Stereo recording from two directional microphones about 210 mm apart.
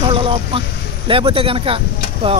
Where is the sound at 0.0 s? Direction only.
25° right (ahead or behind).